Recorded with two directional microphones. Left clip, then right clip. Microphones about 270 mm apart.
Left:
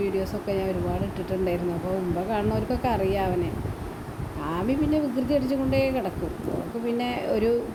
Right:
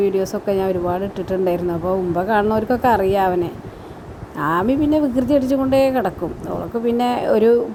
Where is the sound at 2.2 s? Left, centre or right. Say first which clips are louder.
Right 9 dB; right.